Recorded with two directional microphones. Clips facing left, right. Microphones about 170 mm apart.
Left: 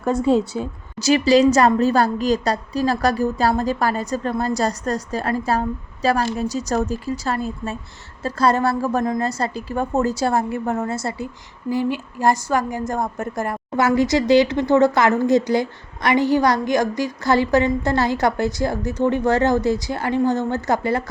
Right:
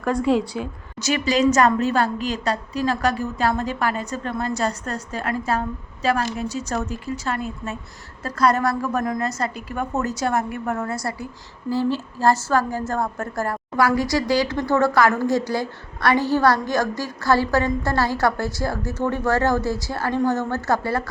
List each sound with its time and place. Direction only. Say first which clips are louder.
0.0 s a woman's voice: left 2 dB; 25° left (ahead or behind)
1.0 s a woman's voice: left 5 dB; 35° left (ahead or behind); by 21.0 s 20° left (ahead or behind)